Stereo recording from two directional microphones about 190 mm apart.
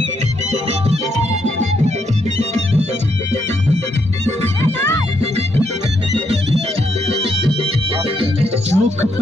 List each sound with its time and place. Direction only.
0.5 s music: 35° right (ahead or behind)
4.6 s music: 15° left (ahead or behind)
8.2 s music: 30° right (ahead or behind)